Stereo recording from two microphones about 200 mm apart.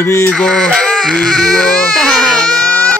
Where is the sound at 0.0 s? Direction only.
10° left (ahead or behind).